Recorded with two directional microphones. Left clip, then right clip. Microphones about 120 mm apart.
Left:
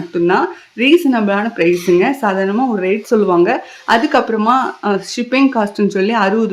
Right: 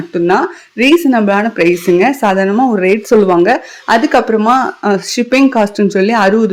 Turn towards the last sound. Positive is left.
turn(degrees=-30)  # may be behind; listen again after turning